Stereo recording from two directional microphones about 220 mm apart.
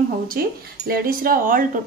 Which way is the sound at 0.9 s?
40° right (ahead or behind).